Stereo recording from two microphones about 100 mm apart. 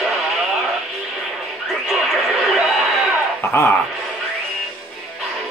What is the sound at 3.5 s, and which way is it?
Speech, 25° left (ahead or behind).